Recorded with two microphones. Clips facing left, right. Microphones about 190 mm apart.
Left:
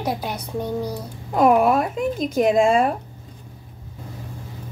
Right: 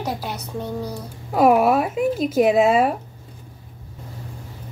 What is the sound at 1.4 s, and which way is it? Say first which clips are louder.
Speech: right 1 dB; 5° right (ahead or behind).